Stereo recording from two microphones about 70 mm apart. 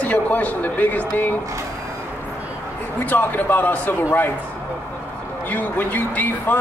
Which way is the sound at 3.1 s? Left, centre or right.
Left.